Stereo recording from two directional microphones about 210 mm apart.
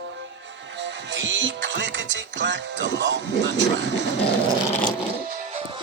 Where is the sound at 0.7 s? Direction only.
55° right (ahead or behind).